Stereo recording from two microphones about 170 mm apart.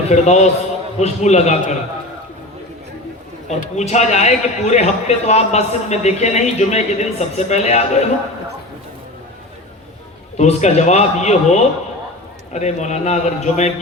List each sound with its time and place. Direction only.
0.1 s a man's voice: 40° left (ahead or behind)
3.5 s a man's voice: 40° left (ahead or behind)
10.3 s a man's voice: 40° left (ahead or behind)